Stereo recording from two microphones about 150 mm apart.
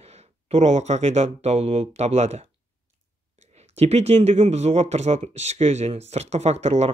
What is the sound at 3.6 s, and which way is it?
Speech, 45° right (ahead or behind).